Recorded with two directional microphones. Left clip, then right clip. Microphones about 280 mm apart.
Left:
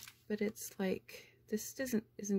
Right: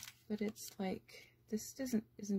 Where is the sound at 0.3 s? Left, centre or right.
Left.